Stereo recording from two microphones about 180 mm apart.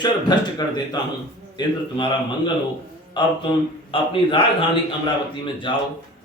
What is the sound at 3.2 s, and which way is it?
A man's voice, 25° left (ahead or behind).